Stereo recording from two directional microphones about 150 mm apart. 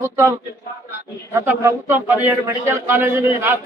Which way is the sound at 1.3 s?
15° right (ahead or behind).